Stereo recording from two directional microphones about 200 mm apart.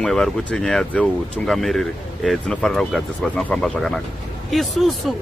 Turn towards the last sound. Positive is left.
turn(degrees=0)  # may be behind; listen again after turning